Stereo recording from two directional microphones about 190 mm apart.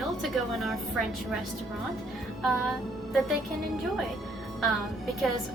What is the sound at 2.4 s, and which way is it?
Speech, centre (ahead or behind).